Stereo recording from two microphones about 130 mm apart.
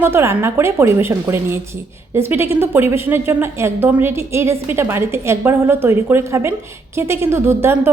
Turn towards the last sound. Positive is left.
turn(degrees=-20)  # may be behind; listen again after turning